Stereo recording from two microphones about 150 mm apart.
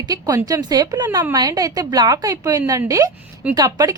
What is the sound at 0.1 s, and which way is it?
A woman's voice, 25° right (ahead or behind).